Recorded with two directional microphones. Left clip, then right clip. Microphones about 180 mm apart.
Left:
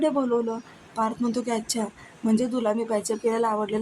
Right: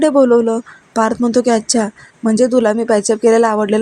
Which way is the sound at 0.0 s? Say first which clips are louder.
Right 13 dB; 35° right (ahead or behind).